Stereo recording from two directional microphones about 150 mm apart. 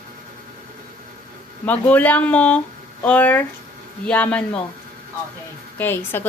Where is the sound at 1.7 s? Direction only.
10° left (ahead or behind).